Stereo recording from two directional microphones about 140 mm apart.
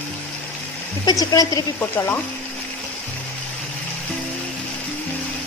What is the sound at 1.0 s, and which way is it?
Speech, 25° left (ahead or behind).